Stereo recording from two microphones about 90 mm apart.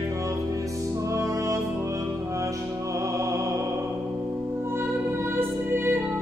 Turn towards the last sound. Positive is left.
turn(degrees=-25)  # may be behind; listen again after turning